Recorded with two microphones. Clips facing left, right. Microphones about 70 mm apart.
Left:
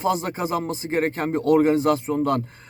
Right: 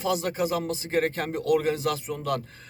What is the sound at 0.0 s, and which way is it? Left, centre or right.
Speech, left.